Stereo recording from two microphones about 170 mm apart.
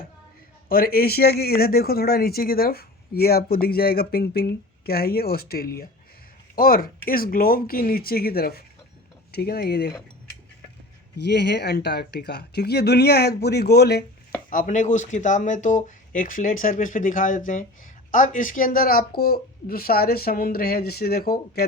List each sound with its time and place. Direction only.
0.7 s speech: 60° left (ahead or behind)
11.2 s speech: 80° left
14.5 s speech: 50° left (ahead or behind)